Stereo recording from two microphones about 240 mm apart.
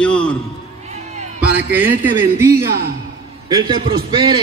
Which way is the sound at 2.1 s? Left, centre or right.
Centre.